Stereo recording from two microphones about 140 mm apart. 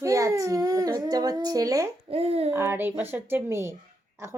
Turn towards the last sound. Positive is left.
turn(degrees=-20)  # may be behind; listen again after turning